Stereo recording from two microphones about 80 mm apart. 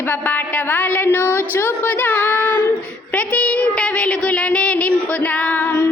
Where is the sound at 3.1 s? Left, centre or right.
Centre.